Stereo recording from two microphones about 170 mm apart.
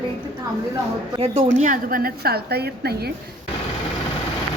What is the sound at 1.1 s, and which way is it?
Speech, 35° right (ahead or behind).